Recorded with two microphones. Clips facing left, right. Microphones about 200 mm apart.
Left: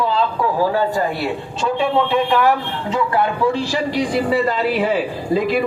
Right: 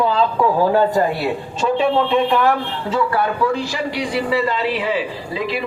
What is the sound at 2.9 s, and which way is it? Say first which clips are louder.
Speech: left 1 dB; 20° left (ahead or behind).